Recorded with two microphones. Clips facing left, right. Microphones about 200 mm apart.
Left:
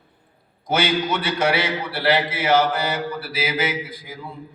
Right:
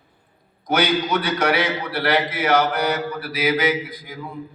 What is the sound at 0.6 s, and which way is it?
A man's voice, 25° left (ahead or behind).